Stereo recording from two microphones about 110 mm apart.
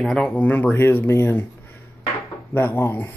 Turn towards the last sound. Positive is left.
turn(degrees=20)  # may be behind; listen again after turning